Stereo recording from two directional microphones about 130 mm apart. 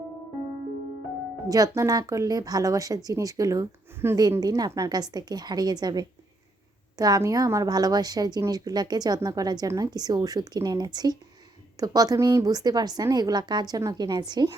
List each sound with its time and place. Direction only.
1.5 s speech: 30° right (ahead or behind)